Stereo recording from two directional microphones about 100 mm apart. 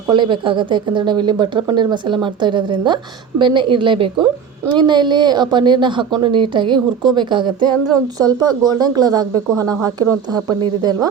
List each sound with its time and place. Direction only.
0.1 s speech: 50° right (ahead or behind)